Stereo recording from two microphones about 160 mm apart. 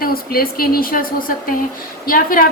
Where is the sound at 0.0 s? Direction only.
65° left (ahead or behind).